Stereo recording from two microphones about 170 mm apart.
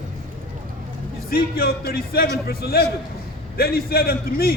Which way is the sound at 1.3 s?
65° left (ahead or behind).